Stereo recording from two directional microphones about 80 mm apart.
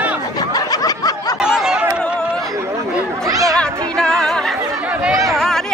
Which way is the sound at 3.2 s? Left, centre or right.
Right.